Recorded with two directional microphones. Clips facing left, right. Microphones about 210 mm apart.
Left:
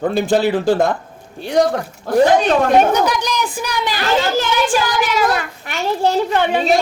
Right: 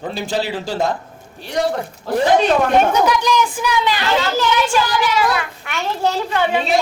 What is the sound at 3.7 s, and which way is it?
Speech, 40° left (ahead or behind).